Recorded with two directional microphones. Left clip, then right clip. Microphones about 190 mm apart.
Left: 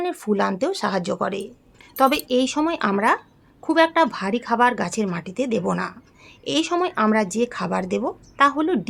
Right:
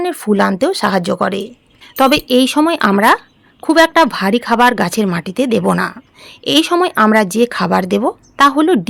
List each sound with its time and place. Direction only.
0.0 s speech: 35° right (ahead or behind)